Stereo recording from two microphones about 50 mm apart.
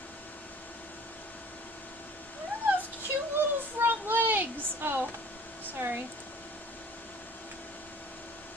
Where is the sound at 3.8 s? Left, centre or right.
Right.